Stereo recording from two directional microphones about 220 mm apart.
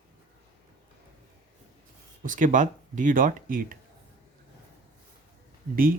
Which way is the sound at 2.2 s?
35° right (ahead or behind).